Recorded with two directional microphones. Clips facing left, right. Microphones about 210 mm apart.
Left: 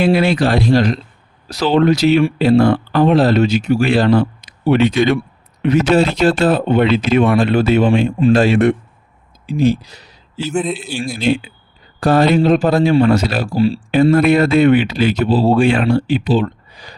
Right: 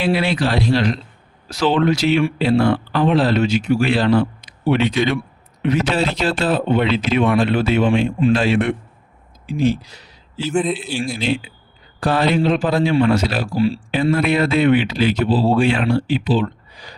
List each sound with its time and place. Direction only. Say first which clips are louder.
0.0 s speech: left 5 dB; 45° left (ahead or behind)
10.5 s a man's voice: even; centre (ahead or behind)
10.8 s speech: even; 45° left (ahead or behind)